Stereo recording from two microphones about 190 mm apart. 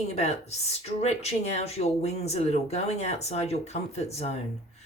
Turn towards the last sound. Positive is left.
turn(degrees=35)  # may be behind; listen again after turning